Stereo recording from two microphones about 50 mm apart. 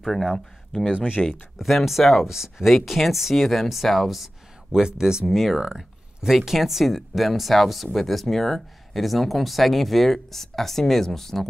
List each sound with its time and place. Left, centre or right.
0.0 s speech: centre
0.9 s speech: centre
1.6 s speech: centre
4.7 s speech: centre